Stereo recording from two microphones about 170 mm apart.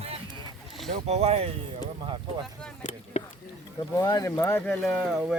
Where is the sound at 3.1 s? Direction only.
40° left (ahead or behind).